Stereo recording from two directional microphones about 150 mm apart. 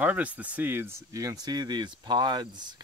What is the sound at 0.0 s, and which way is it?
Speech, 10° right (ahead or behind).